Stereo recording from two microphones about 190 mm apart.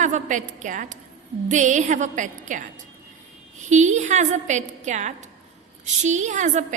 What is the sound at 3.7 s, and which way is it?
A woman's voice, 40° right (ahead or behind).